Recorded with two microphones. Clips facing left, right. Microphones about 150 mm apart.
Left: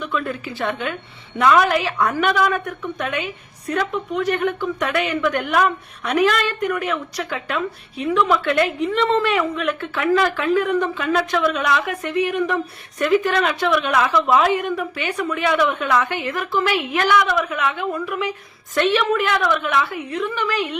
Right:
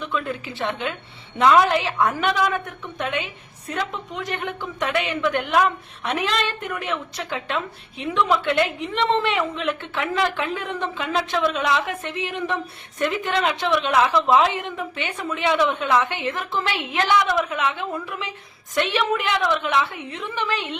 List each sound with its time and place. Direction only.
0.0 s a woman's voice: 20° right (ahead or behind)